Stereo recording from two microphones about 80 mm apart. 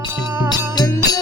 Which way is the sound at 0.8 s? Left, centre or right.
Left.